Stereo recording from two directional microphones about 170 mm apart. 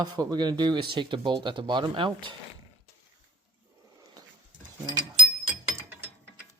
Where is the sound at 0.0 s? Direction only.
25° right (ahead or behind).